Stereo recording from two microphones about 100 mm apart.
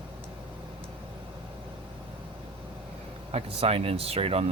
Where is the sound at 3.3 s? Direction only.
90° right.